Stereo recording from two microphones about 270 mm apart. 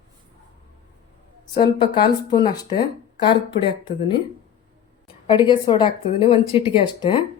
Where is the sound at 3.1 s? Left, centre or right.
Centre.